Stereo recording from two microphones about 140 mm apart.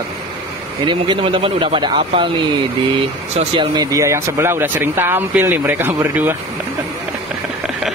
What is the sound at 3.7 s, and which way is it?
Speech, 20° right (ahead or behind).